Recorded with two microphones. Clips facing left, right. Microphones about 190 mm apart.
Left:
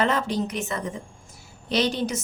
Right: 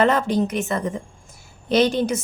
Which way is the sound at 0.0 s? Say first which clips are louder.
Right 5 dB; 50° right (ahead or behind).